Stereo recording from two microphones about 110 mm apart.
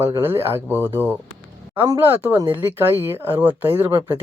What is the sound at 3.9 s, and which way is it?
Speech, 35° right (ahead or behind).